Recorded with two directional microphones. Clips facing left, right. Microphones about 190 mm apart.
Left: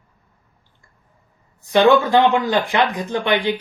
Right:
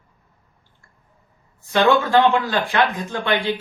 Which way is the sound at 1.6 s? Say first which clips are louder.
Left 3 dB; 15° left (ahead or behind).